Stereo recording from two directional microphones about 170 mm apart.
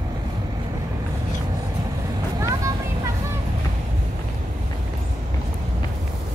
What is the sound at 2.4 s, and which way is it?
Vehicle, 15° right (ahead or behind).